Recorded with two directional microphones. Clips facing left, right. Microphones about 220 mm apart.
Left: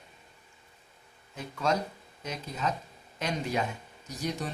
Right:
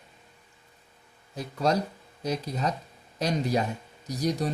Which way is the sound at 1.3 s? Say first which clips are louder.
Right 4 dB; 35° right (ahead or behind).